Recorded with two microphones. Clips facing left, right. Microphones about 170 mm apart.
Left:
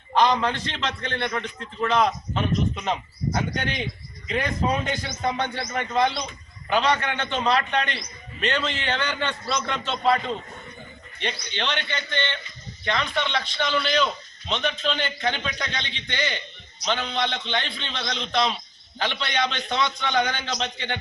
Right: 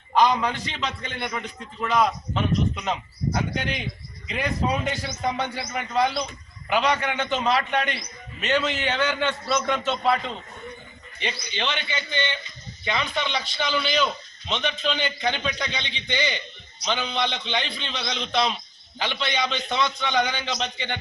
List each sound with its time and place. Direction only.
0.1 s a man's voice: 10° right (ahead or behind)
4.9 s a man's voice: 5° right (ahead or behind)
11.2 s a man's voice: 5° right (ahead or behind)